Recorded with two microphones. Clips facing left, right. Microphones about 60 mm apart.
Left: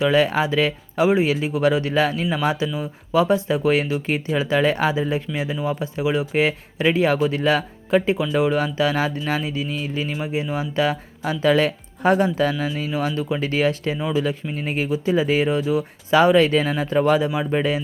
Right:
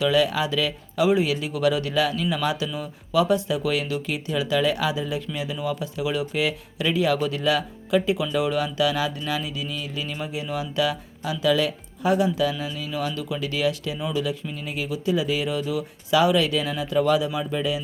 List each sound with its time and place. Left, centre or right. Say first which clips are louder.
0.0 s speech: left 3 dB; left